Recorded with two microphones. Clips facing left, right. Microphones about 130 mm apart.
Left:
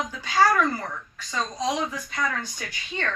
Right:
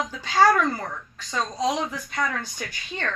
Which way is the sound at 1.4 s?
10° right (ahead or behind).